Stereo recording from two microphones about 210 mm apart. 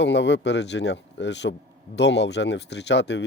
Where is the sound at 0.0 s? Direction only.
55° left (ahead or behind).